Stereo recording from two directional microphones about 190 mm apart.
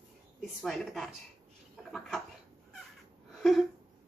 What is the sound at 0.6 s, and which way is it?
Speech, centre (ahead or behind).